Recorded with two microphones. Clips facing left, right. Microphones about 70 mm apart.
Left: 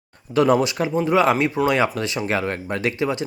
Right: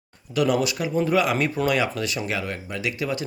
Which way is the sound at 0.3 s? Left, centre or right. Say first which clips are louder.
Left 5 dB; left.